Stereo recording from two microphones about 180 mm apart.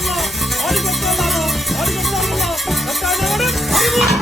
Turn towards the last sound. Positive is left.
turn(degrees=0)  # may be behind; listen again after turning